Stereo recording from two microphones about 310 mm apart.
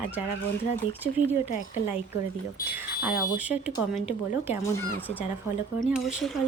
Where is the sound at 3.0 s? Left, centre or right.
Centre.